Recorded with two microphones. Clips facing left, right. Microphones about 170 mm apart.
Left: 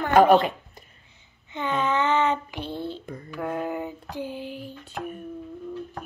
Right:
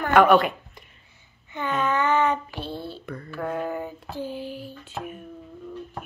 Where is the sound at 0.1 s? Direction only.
30° left (ahead or behind).